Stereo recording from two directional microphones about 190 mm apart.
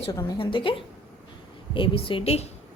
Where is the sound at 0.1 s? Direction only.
20° left (ahead or behind).